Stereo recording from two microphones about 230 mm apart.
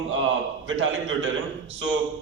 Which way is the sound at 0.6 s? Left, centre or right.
Right.